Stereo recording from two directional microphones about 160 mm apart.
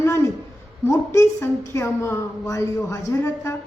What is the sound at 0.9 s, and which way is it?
A woman's voice, 20° left (ahead or behind).